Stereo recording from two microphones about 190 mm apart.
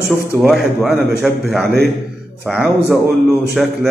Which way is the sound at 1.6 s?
60° right (ahead or behind).